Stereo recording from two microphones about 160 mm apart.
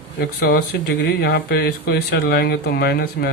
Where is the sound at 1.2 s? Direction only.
90° left.